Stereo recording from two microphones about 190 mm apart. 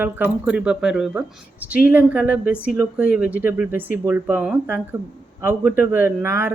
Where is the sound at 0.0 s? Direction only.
5° right (ahead or behind).